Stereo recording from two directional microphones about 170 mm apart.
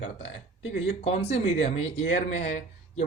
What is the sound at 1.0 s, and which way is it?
Speech, 40° left (ahead or behind).